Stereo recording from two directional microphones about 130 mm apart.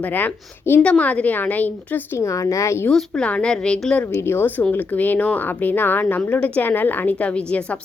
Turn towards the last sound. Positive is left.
turn(degrees=10)  # may be behind; listen again after turning